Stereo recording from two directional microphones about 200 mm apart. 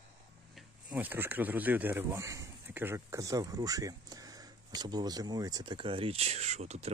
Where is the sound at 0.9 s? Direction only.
10° right (ahead or behind).